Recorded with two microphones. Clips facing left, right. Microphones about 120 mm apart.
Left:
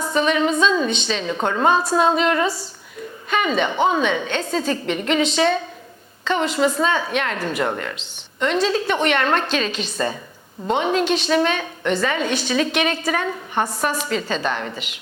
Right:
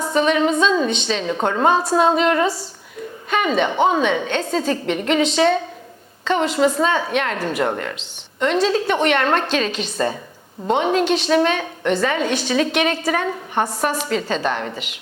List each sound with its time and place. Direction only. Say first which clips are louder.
0.1 s a woman's voice: right 2 dB; 55° right (ahead or behind)
7.9 s a woman's voice: right 1 dB; 60° right (ahead or behind)
13.3 s a woman's voice: right 1 dB; 35° right (ahead or behind)
14.1 s a woman's voice: right 2 dB; 50° right (ahead or behind)